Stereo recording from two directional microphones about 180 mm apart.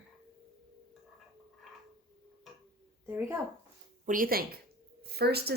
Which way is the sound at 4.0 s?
50° right (ahead or behind).